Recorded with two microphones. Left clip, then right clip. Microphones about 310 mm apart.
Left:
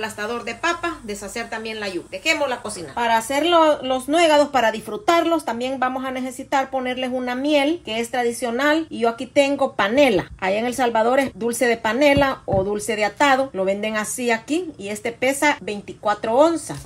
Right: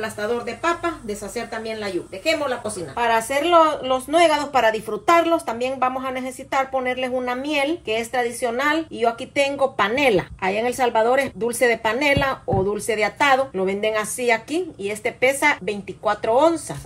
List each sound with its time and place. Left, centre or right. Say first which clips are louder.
0.5 s speech: even; centre
3.0 s a woman's voice: left 1 dB; left